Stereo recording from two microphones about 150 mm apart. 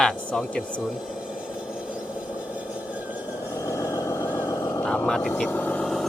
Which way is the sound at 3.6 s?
20° left (ahead or behind).